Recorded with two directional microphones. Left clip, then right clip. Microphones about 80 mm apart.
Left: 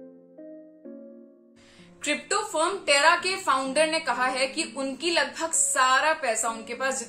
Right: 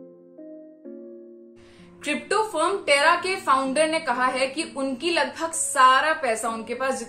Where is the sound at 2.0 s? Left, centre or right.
Left.